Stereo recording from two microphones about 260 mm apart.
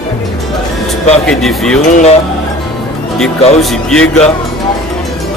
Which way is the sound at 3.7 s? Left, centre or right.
Centre.